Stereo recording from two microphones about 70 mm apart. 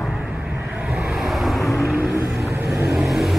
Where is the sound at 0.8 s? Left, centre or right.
Centre.